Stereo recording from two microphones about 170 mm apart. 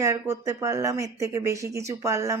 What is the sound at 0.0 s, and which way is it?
Speech, 15° right (ahead or behind).